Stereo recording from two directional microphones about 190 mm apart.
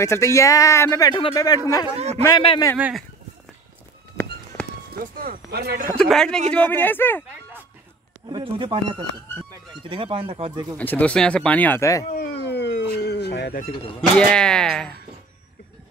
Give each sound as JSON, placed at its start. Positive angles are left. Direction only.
{"t": 0.0, "sound": "a man's voice", "side_deg": 15}
{"t": 4.9, "sound": "speech", "side_deg": -50}
{"t": 5.9, "sound": "speech", "side_deg": 5}
{"t": 8.3, "sound": "speech", "side_deg": -25}
{"t": 10.8, "sound": "speech", "side_deg": 10}
{"t": 12.2, "sound": "a sound", "side_deg": 60}
{"t": 14.1, "sound": "speech", "side_deg": 5}